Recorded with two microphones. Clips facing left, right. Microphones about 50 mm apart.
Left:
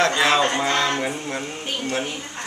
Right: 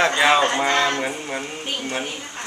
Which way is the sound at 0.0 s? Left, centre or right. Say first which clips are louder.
Right 1 dB; centre.